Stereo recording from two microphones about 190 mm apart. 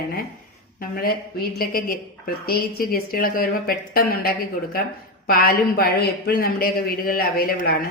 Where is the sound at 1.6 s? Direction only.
50° left (ahead or behind).